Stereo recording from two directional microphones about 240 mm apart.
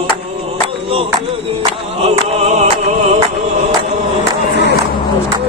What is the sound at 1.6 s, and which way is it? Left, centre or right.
Music, right.